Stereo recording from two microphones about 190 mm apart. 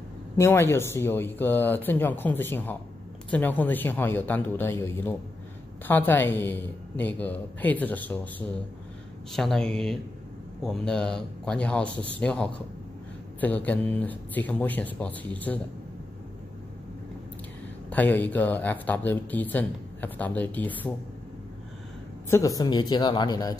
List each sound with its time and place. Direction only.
0.4 s speech: 10° left (ahead or behind)
17.8 s speech: 10° left (ahead or behind)
22.3 s speech: 20° left (ahead or behind)